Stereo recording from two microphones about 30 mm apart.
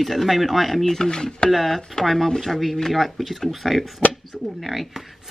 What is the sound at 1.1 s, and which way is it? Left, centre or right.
Speech, left.